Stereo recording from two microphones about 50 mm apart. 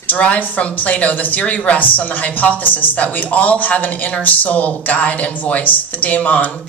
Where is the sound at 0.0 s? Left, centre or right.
Left.